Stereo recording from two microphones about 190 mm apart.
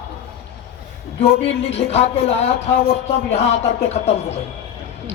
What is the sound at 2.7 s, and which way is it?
Speech, 50° left (ahead or behind).